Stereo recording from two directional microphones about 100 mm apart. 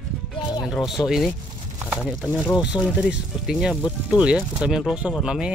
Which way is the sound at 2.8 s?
20° left (ahead or behind).